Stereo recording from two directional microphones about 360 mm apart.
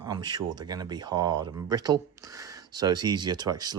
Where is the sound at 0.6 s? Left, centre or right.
Centre.